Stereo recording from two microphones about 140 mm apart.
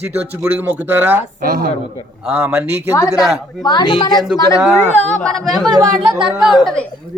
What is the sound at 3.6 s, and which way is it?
Speech, 30° left (ahead or behind).